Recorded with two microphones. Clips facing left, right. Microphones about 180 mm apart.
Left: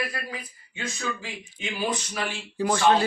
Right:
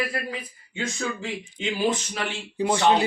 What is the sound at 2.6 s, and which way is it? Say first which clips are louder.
Speech: right 1 dB; 20° right (ahead or behind).